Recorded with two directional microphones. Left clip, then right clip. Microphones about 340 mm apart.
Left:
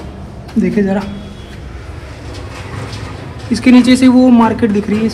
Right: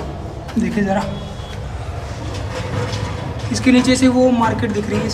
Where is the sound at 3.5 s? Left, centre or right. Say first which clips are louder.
Left 5 dB; centre.